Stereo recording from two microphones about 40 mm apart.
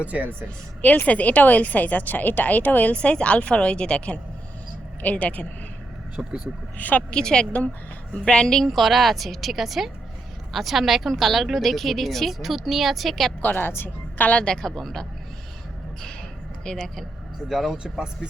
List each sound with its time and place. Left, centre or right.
0.0 s speech: right
1.0 s a woman's voice: left
2.9 s a woman's voice: left
5.0 s speech: left
6.1 s speech: right
6.7 s a woman's voice: left
7.1 s a woman's voice: centre
8.6 s a woman's voice: centre
13.4 s a woman's voice: left
14.3 s a woman's voice: centre
14.8 s speech: centre
16.6 s speech: centre
17.5 s speech: centre